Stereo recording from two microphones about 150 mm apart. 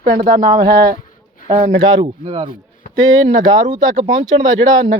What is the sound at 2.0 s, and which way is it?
Speech, 40° right (ahead or behind).